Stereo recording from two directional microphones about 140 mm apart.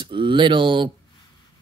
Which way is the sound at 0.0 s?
35° right (ahead or behind).